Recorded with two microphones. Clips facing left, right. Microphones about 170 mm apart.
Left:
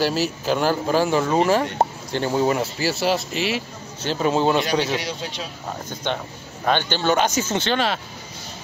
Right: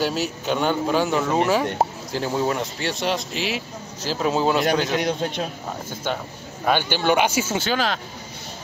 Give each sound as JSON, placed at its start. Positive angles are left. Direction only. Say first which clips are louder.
{"t": 0.0, "sound": "speech", "louder": "left 2 dB", "side_deg": 0}
{"t": 4.9, "sound": "a man's voice", "louder": "right 5 dB", "side_deg": -50}
{"t": 6.0, "sound": "speech", "louder": "left 1 dB", "side_deg": -5}